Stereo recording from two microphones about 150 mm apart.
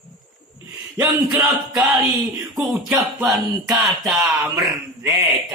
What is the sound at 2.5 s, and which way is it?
Music, 5° right (ahead or behind).